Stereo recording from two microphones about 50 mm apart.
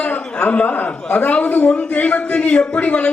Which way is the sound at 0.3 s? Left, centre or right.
Left.